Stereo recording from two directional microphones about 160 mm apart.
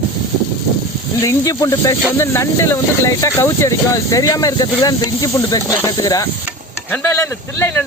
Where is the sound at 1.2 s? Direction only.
20° left (ahead or behind).